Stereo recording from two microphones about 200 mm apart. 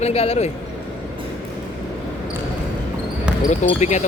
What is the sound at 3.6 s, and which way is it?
Speech, 35° left (ahead or behind).